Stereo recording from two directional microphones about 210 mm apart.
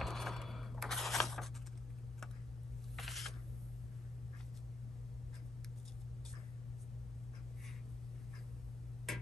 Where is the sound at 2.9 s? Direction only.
Centre (ahead or behind).